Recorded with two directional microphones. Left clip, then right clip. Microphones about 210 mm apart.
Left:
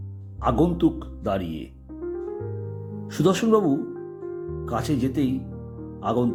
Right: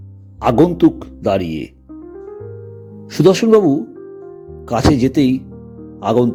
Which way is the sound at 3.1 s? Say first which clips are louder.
Right 10 dB; 25° right (ahead or behind).